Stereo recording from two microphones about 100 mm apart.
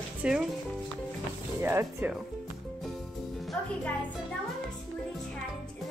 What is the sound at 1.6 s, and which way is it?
Speech, 25° right (ahead or behind).